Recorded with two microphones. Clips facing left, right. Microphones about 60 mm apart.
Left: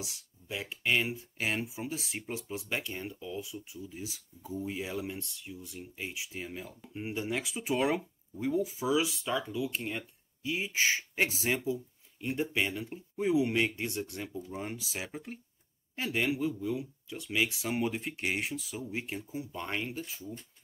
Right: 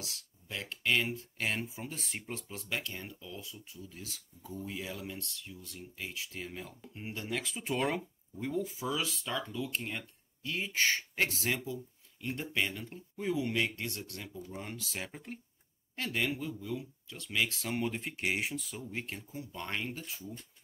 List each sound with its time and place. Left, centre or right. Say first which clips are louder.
0.0 s speech: left 3 dB; centre
6.9 s speech: left 4 dB; centre